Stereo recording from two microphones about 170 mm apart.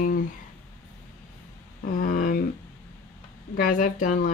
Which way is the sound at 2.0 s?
50° left (ahead or behind).